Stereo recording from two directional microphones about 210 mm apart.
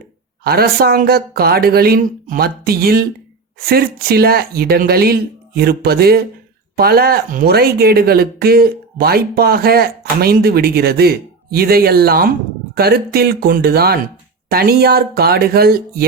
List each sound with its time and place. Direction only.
0.4 s speech: 45° right (ahead or behind)